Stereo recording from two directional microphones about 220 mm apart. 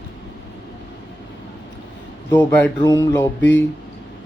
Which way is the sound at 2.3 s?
10° left (ahead or behind).